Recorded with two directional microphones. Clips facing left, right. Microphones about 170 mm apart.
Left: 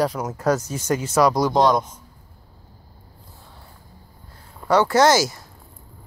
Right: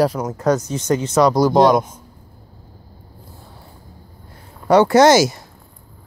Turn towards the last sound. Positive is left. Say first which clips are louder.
# right 5 dB
turn(degrees=-20)  # may be behind; listen again after turning